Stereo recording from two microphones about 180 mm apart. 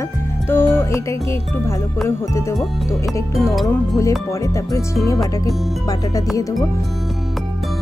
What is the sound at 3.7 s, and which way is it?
Speech, 15° left (ahead or behind).